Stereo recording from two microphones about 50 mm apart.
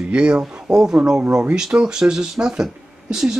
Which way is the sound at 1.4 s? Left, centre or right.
Right.